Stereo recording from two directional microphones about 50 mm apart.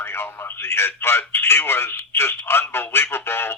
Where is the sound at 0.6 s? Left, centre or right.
Left.